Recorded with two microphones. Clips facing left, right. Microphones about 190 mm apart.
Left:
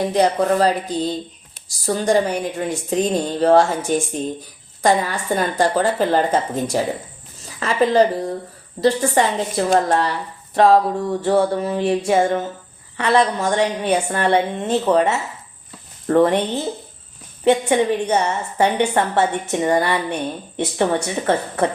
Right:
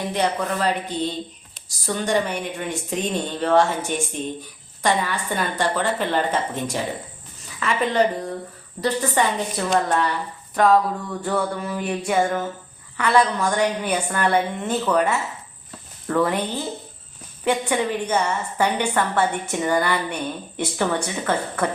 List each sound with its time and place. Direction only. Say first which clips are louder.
0.1 s a woman's voice: left 5 dB; 35° left (ahead or behind)
21.2 s a woman's voice: left 5 dB; 30° left (ahead or behind)